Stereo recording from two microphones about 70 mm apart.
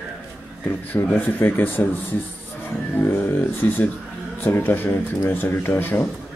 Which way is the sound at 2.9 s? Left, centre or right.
Left.